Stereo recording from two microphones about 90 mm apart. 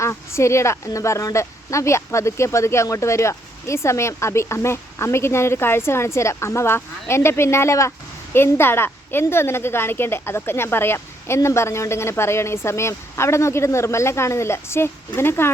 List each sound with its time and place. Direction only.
0.0 s speech: 30° left (ahead or behind)